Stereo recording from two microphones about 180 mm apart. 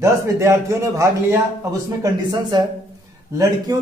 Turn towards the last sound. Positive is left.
turn(degrees=-20)  # may be behind; listen again after turning